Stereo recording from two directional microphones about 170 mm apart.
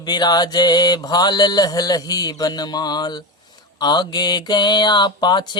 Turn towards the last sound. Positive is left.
turn(degrees=25)  # may be behind; listen again after turning